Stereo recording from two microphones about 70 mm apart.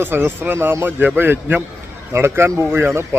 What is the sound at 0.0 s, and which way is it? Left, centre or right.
Speech, right.